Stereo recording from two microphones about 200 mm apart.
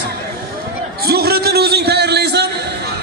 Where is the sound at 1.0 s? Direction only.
50° right (ahead or behind).